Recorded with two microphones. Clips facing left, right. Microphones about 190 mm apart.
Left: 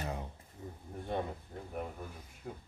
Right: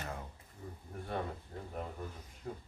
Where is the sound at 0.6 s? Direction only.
20° left (ahead or behind).